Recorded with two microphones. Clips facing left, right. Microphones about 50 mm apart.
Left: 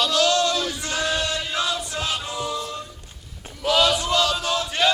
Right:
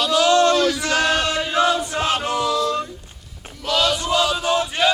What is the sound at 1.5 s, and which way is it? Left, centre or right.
Chant, right.